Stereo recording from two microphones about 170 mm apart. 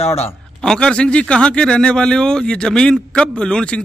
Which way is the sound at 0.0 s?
35° left (ahead or behind).